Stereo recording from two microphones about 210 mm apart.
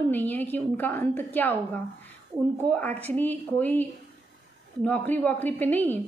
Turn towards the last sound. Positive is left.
turn(degrees=10)  # may be behind; listen again after turning